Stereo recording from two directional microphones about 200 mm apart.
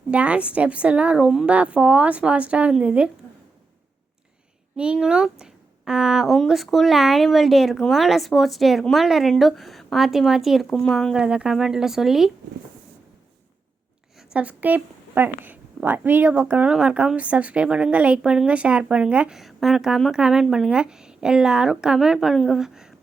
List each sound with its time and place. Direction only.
0.1 s a woman's voice: 5° right (ahead or behind)
4.8 s a woman's voice: 5° right (ahead or behind)
14.3 s a woman's voice: 10° right (ahead or behind)